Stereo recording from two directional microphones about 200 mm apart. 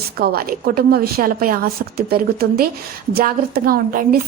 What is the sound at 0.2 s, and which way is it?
A woman's voice, 50° right (ahead or behind).